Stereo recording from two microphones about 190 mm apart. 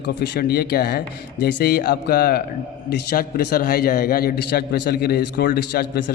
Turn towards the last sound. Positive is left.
turn(degrees=55)  # may be behind; listen again after turning